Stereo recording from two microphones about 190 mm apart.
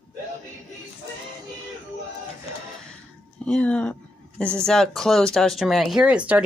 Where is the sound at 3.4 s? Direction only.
5° left (ahead or behind).